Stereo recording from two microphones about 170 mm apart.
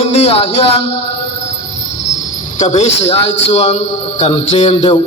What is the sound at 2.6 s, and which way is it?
A man's voice, 40° left (ahead or behind).